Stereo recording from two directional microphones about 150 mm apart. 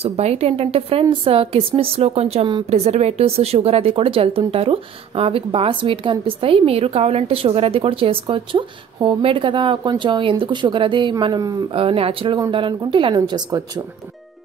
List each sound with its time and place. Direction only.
0.0 s a woman's voice: 45° right (ahead or behind); by 11.6 s 25° right (ahead or behind)
11.7 s a woman's voice: 40° right (ahead or behind)